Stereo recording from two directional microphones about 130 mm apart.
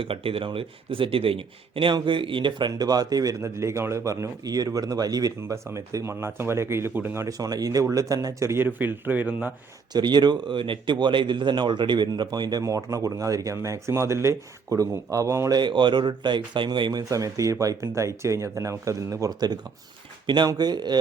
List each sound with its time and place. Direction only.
0.0 s speech: 45° right (ahead or behind); by 9.5 s 10° right (ahead or behind)
9.9 s speech: 35° right (ahead or behind)